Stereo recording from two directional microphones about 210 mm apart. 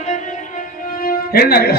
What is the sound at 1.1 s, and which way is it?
Speech, 45° left (ahead or behind).